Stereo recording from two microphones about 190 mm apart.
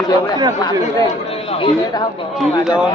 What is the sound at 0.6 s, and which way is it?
Speech, 20° left (ahead or behind).